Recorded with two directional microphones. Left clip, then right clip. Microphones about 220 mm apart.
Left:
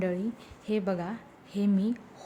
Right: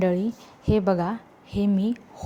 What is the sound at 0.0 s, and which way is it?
A woman's voice, 25° right (ahead or behind).